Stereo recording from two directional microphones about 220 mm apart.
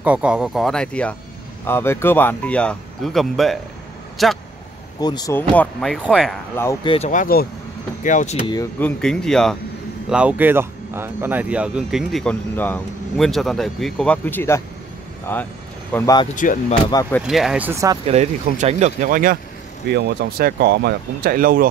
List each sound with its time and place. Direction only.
0.0 s speech: 5° right (ahead or behind)
5.0 s speech: 15° left (ahead or behind)
5.5 s speech: 5° left (ahead or behind)
6.9 s speech: 30° left (ahead or behind)
8.5 s speech: 10° left (ahead or behind)
16.3 s speech: 35° left (ahead or behind)
16.9 s speech: 15° left (ahead or behind)
17.3 s speech: centre (ahead or behind)
18.0 s speech: 30° right (ahead or behind)
19.9 s speech: 50° right (ahead or behind)